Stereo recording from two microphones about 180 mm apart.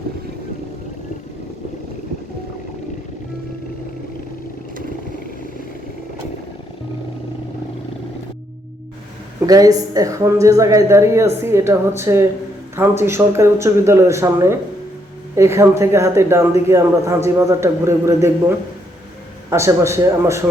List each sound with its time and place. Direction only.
9.5 s a man's voice: 20° right (ahead or behind)